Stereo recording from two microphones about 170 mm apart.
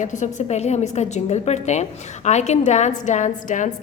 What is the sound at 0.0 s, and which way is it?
A woman's voice, 45° left (ahead or behind).